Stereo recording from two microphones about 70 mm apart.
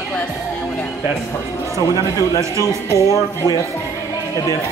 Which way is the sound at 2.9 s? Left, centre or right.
Left.